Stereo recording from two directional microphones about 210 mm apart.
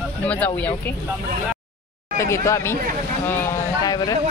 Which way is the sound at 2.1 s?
15° left (ahead or behind).